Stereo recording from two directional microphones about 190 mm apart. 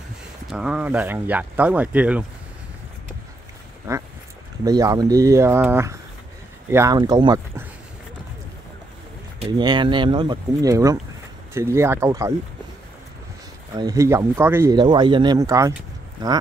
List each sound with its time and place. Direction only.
0.5 s speech: 5° right (ahead or behind)
3.9 s speech: 15° right (ahead or behind)
9.6 s speech: 25° right (ahead or behind)
13.7 s speech: 20° right (ahead or behind)